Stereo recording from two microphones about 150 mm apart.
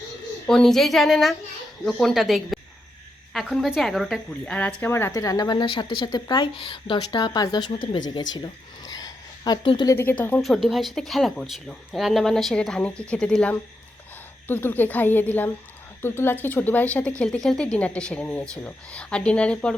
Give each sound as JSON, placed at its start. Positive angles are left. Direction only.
{"t": 0.4, "sound": "speech", "side_deg": 5}
{"t": 8.9, "sound": "a sound", "side_deg": 25}
{"t": 9.9, "sound": "speech", "side_deg": 15}
{"t": 10.4, "sound": "speech", "side_deg": 0}